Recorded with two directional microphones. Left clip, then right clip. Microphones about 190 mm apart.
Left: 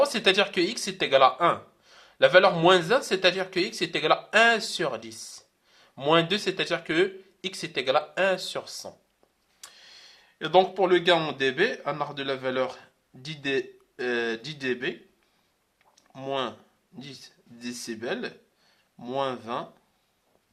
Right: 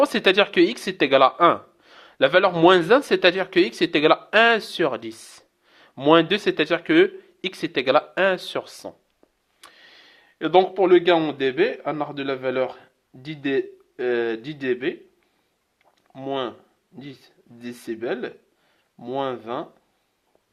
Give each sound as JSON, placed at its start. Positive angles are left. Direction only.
{"t": 0.0, "sound": "speech", "side_deg": -35}
{"t": 16.1, "sound": "speech", "side_deg": -25}